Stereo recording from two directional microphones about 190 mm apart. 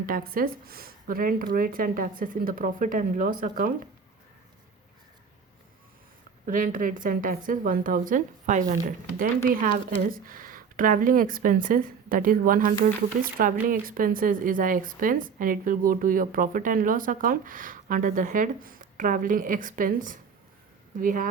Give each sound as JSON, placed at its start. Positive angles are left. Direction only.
{"t": 0.0, "sound": "speech", "side_deg": -50}
{"t": 6.4, "sound": "speech", "side_deg": -45}